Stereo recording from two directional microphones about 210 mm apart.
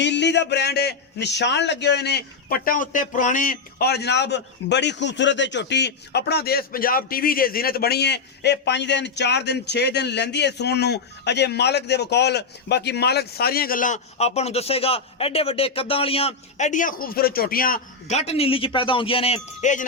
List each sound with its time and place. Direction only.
0.0 s a man's voice: 55° left (ahead or behind); by 19.8 s 30° left (ahead or behind)